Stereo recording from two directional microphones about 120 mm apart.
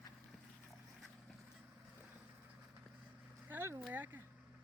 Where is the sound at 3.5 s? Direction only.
20° right (ahead or behind).